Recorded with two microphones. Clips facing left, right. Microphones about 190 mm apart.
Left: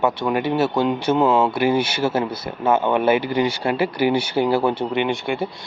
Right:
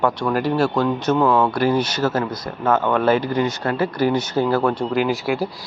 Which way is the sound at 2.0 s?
25° left (ahead or behind).